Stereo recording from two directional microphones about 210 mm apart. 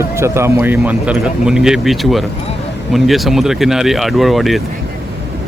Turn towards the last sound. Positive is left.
turn(degrees=0)  # may be behind; listen again after turning